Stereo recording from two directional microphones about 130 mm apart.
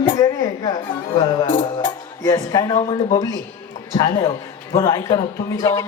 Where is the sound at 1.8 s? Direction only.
25° left (ahead or behind).